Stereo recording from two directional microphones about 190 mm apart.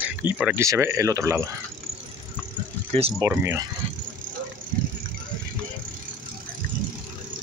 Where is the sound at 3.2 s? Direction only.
10° right (ahead or behind).